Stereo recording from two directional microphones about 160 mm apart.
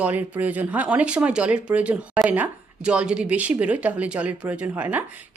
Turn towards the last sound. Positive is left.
turn(degrees=-10)  # may be behind; listen again after turning